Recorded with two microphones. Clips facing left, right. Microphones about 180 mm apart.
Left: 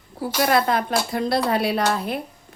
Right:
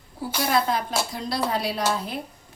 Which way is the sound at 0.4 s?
60° left (ahead or behind).